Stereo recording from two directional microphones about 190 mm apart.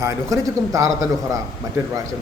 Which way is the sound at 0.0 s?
15° right (ahead or behind).